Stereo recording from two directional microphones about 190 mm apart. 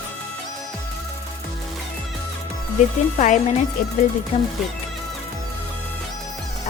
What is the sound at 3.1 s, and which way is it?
Speech, 40° left (ahead or behind).